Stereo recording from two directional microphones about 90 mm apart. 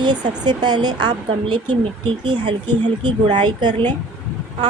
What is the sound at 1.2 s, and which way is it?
Speech, 65° right (ahead or behind).